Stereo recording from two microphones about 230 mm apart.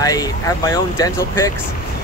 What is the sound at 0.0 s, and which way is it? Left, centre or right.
Speech, centre.